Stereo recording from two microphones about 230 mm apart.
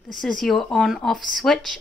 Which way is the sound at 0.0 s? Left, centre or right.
Centre.